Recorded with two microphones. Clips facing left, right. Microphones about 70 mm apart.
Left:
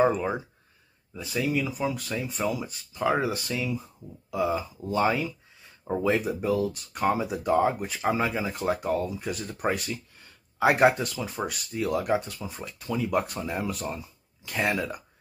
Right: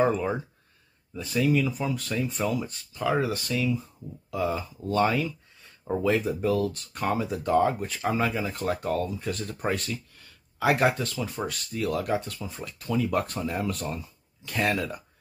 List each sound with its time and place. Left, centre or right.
0.0 s speech: centre
2.9 s speech: left
10.6 s speech: left; by 15.0 s centre